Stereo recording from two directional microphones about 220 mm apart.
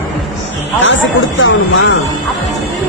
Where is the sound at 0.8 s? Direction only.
60° left (ahead or behind).